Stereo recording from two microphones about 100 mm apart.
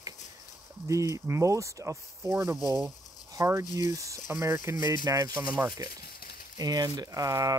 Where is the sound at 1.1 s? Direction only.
30° right (ahead or behind).